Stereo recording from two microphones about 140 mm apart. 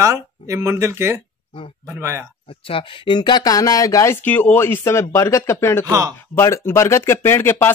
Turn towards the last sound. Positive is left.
turn(degrees=15)  # may be behind; listen again after turning